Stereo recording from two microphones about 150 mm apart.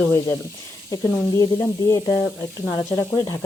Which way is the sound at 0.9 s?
20° left (ahead or behind).